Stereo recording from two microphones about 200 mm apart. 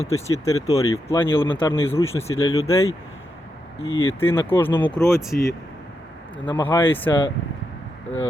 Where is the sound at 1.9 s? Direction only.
15° left (ahead or behind).